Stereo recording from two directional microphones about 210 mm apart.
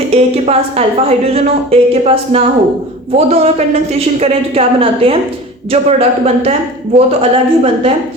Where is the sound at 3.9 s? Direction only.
30° right (ahead or behind).